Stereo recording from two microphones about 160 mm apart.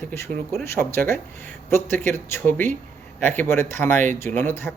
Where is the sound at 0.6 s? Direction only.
15° left (ahead or behind).